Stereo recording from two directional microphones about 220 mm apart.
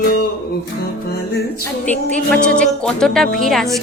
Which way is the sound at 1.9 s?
5° left (ahead or behind).